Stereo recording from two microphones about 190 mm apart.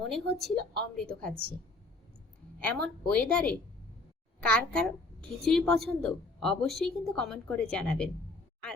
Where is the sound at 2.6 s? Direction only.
5° left (ahead or behind).